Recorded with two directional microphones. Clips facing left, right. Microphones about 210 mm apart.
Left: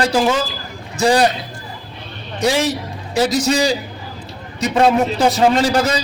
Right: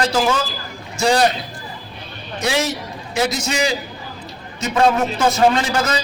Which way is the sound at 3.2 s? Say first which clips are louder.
Left 4 dB; 35° left (ahead or behind).